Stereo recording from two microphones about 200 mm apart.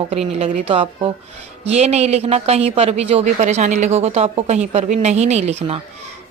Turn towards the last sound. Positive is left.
turn(degrees=-30)  # may be behind; listen again after turning